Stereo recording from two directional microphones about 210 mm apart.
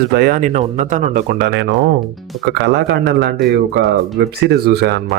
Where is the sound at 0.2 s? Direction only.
40° right (ahead or behind).